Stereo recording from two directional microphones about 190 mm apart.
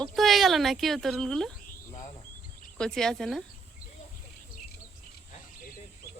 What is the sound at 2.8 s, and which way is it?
Speech, 5° left (ahead or behind).